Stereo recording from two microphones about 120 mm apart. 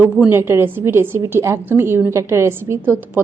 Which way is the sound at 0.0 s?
15° right (ahead or behind).